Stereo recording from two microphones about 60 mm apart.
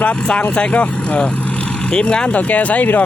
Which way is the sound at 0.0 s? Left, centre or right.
Left.